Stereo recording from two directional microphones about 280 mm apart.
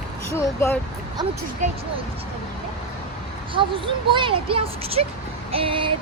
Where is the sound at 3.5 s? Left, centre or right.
Centre.